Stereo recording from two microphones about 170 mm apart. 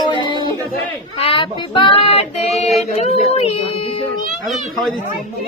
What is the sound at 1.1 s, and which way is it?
Speech, 30° left (ahead or behind).